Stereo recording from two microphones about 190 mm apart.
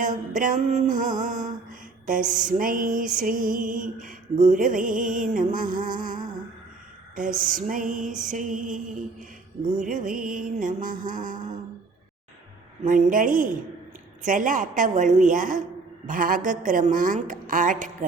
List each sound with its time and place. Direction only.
0.0 s music: 45° right (ahead or behind)
7.2 s music: 45° right (ahead or behind)
9.8 s music: 45° right (ahead or behind)
12.8 s music: 40° right (ahead or behind)